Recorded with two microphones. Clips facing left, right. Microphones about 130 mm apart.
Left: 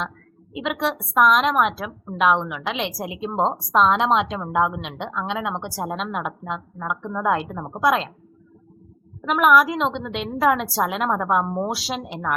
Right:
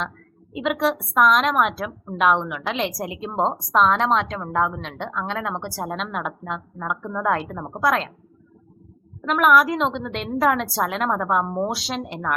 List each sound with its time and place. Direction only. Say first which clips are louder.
0.5 s a woman's voice: right 3 dB; centre (ahead or behind)
9.2 s a woman's voice: even; 5° left (ahead or behind)